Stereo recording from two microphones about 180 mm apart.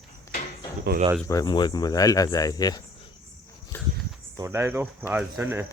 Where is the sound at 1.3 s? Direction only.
20° left (ahead or behind).